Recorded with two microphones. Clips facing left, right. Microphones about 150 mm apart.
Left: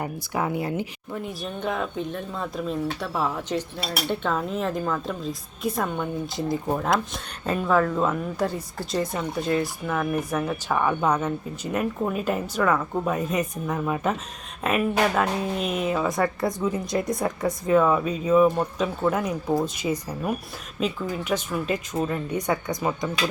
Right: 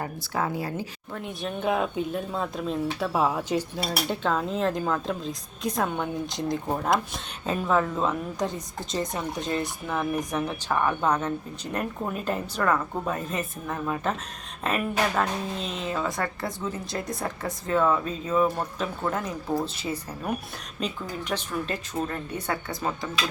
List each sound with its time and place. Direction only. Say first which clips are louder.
0.0 s speech: left 2 dB; 15° left (ahead or behind)
1.4 s a woman's voice: right 4 dB; 5° right (ahead or behind)
4.1 s a woman's voice: left 2 dB; centre (ahead or behind); by 23.0 s 20° left (ahead or behind)